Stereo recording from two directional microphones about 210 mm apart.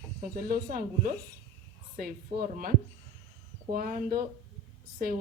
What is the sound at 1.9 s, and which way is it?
Speech, 45° right (ahead or behind).